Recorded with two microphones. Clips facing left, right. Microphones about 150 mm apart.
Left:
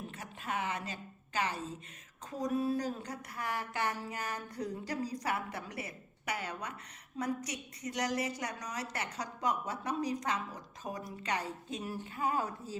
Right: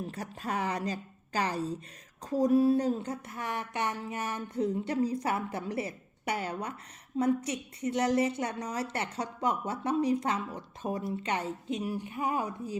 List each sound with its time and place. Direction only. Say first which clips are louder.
0.1 s a woman's voice: right 5 dB; 40° right (ahead or behind)
11.8 s speech: even; 15° right (ahead or behind)